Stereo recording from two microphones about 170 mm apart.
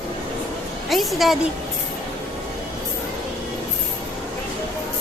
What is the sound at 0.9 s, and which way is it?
Speech, centre (ahead or behind).